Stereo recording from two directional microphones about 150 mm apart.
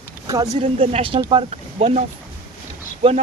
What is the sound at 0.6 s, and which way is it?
Speech, 40° right (ahead or behind).